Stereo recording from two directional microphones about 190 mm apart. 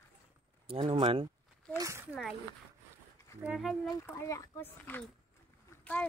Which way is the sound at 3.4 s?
Centre (ahead or behind).